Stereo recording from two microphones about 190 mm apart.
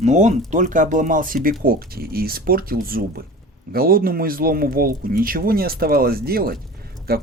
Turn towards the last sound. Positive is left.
turn(degrees=-55)  # may be behind; listen again after turning